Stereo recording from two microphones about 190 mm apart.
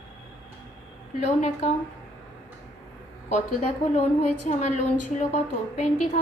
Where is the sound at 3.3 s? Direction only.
40° left (ahead or behind).